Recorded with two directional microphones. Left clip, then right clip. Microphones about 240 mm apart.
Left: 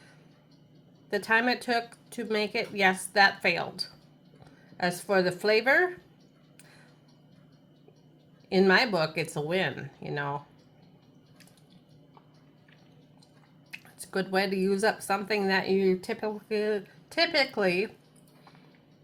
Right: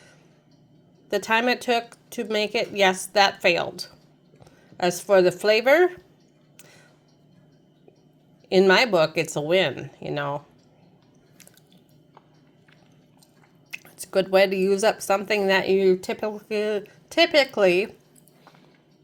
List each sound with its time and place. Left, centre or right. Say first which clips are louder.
1.1 s speech: right 4 dB; right
6.6 s a sound: right 5 dB; right
8.4 s speech: right 5 dB; right
13.7 s speech: right 7 dB; right